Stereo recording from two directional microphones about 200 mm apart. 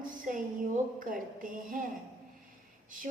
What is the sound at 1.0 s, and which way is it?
Speech, 40° right (ahead or behind).